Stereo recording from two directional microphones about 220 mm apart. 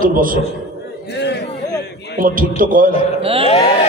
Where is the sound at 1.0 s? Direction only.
50° left (ahead or behind).